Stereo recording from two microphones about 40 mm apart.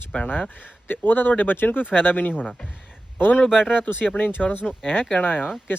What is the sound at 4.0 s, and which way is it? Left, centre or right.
Speech, left.